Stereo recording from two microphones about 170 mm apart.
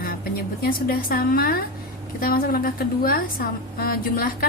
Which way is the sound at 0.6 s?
60° left (ahead or behind).